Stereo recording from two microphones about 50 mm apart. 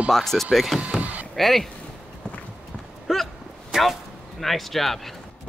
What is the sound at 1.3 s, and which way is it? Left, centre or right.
Speech, centre.